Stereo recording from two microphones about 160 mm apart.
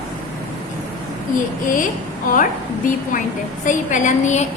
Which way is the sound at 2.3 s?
60° left (ahead or behind).